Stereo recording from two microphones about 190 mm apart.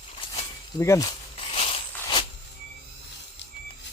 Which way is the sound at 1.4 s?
30° left (ahead or behind).